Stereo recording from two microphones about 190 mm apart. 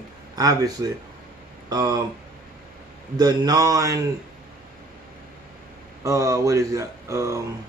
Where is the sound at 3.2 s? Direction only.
20° right (ahead or behind).